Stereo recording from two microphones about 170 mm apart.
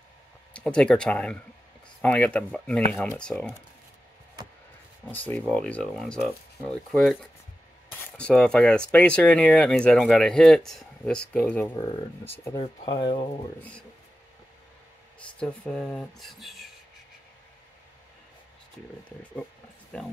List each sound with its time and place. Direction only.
0.5 s speech: 5° left (ahead or behind)
5.0 s speech: 10° left (ahead or behind); by 13.3 s 30° left (ahead or behind)
15.1 s speech: 5° left (ahead or behind)